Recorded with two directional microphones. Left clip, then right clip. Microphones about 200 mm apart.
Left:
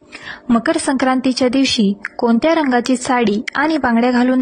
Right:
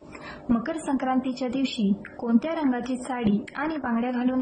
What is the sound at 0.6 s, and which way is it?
Speech, 40° left (ahead or behind).